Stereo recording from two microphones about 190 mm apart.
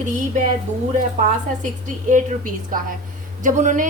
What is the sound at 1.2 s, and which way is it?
A woman's voice, 40° right (ahead or behind).